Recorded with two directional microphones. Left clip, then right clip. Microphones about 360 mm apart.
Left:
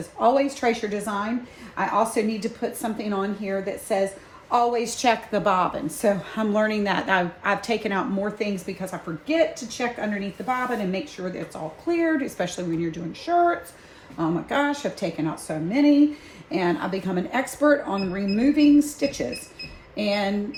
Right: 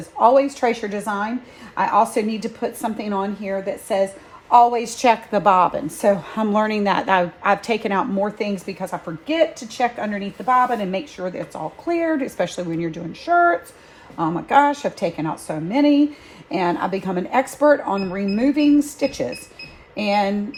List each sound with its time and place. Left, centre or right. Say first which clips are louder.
0.2 s a woman's voice: right 6 dB; centre